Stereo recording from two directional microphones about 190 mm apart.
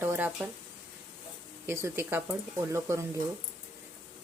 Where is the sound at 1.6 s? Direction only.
15° right (ahead or behind).